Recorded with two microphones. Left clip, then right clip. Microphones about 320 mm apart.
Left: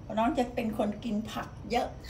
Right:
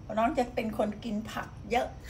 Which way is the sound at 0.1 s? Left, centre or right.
Centre.